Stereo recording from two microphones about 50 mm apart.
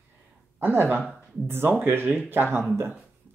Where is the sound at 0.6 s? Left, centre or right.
Right.